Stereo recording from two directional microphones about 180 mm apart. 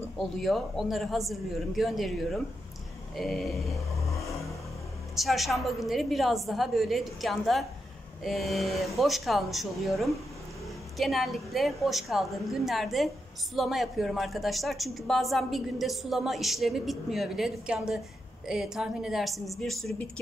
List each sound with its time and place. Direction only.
0.2 s a woman's voice: centre (ahead or behind)
5.1 s a woman's voice: centre (ahead or behind)